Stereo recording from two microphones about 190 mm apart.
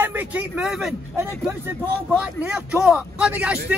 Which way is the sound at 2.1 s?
5° right (ahead or behind).